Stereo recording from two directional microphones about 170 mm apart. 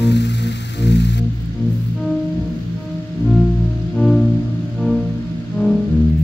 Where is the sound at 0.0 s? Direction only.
90° left.